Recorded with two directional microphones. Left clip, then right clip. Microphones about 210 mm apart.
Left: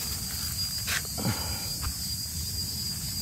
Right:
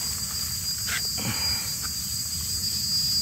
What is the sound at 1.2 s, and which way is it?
Wild animals, 15° left (ahead or behind).